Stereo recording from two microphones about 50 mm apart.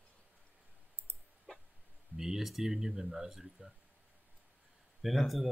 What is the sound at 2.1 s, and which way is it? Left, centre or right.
Speech, centre.